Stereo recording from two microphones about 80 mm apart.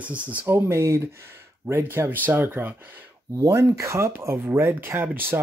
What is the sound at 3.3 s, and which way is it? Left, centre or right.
Speech, right.